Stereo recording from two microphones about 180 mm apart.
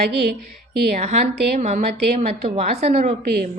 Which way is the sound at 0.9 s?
40° right (ahead or behind).